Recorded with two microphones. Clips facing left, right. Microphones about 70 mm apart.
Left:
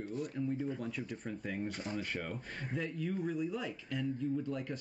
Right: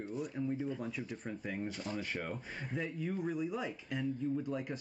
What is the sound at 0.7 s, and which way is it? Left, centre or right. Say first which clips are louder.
Speech: even; centre.